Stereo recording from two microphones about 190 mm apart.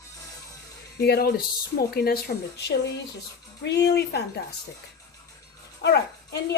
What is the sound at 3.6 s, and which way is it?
Speech, 60° left (ahead or behind).